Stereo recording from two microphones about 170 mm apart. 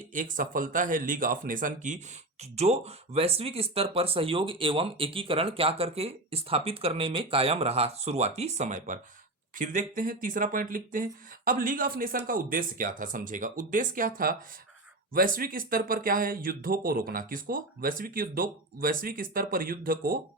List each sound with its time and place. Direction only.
0.1 s speech: 50° right (ahead or behind)
2.4 s speech: 40° right (ahead or behind); by 20.1 s 55° right (ahead or behind)